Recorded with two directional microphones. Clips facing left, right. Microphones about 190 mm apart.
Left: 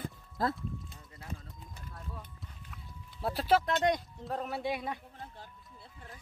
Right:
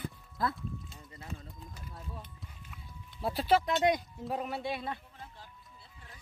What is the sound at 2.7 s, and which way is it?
Speech, centre (ahead or behind).